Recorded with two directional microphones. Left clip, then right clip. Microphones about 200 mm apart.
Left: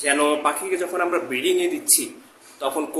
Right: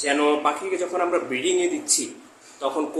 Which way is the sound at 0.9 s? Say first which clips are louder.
Right 1 dB; 15° left (ahead or behind).